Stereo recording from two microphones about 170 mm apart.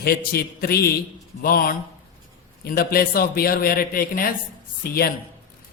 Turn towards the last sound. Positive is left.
turn(degrees=60)  # may be behind; listen again after turning